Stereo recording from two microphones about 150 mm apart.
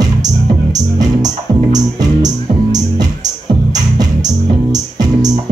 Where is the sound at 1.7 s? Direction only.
25° right (ahead or behind).